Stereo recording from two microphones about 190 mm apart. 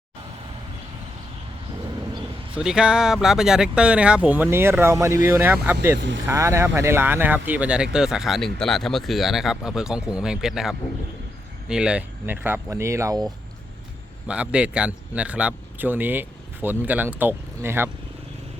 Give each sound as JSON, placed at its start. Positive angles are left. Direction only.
{"t": 2.6, "sound": "speech", "side_deg": -5}
{"t": 6.0, "sound": "speech", "side_deg": -70}
{"t": 6.2, "sound": "a man's voice", "side_deg": -15}
{"t": 14.3, "sound": "a man's voice", "side_deg": -5}